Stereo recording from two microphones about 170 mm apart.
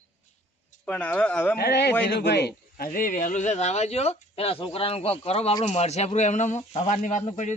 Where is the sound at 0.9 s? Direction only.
10° left (ahead or behind).